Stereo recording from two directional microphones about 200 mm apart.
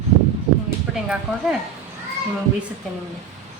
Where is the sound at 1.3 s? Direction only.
Centre (ahead or behind).